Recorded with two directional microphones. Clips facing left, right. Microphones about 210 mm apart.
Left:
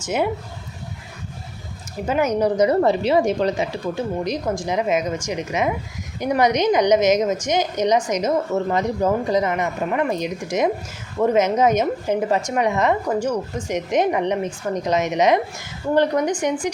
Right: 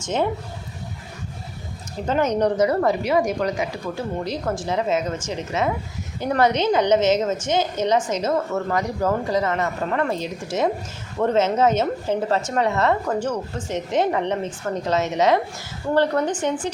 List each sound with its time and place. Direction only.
0.0 s a woman's voice: 10° left (ahead or behind)
2.0 s a woman's voice: 10° left (ahead or behind)
2.6 s a woman's voice: 25° left (ahead or behind)